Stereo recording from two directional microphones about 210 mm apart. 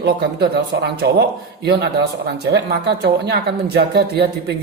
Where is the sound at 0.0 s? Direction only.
50° right (ahead or behind).